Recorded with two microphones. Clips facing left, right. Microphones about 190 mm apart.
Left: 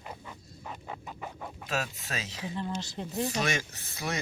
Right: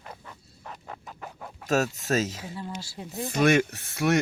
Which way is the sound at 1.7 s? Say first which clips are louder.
Right 10 dB; 45° right (ahead or behind).